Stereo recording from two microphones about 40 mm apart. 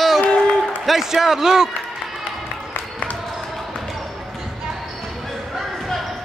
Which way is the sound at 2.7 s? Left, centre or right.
Left.